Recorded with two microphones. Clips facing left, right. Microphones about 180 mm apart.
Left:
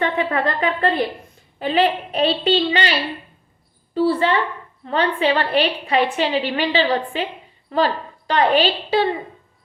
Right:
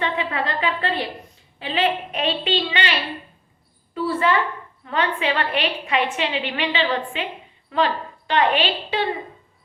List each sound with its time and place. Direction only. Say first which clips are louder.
0.0 s a woman's voice: left 4 dB; 45° left (ahead or behind)